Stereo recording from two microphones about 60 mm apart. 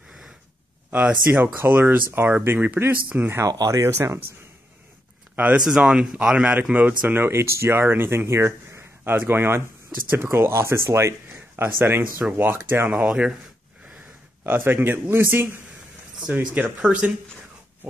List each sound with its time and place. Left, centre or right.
1.2 s speech: right
3.4 s speech: right
3.8 s speech: right
5.3 s speech: right
5.7 s speech: centre
7.2 s speech: right
9.1 s speech: right
12.9 s speech: centre
14.4 s speech: right
16.3 s speech: right